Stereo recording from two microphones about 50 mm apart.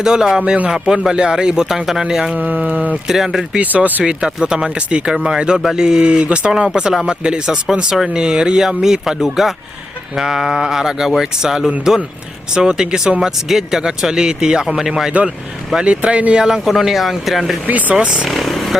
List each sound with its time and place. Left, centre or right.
0.0 s speech: centre
2.3 s speech: right
3.1 s speech: centre
3.6 s speech: right
4.0 s speech: centre
15.7 s speech: right
16.6 s speech: centre
17.7 s speech: right
18.0 s speech: centre
18.3 s vehicle: centre